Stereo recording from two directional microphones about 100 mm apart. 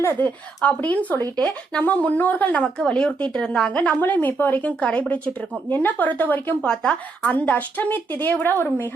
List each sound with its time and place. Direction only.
0.0 s speech: 25° left (ahead or behind)
0.6 s a woman's voice: 15° left (ahead or behind)